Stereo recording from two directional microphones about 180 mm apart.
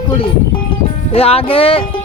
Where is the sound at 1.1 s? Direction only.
35° left (ahead or behind).